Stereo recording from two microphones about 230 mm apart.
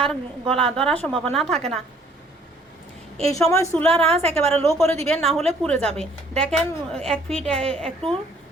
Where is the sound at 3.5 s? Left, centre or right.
Centre.